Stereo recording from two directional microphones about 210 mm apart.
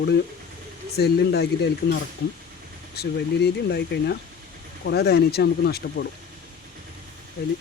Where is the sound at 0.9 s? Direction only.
50° left (ahead or behind).